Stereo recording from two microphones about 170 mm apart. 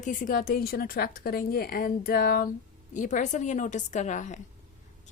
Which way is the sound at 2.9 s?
50° left (ahead or behind).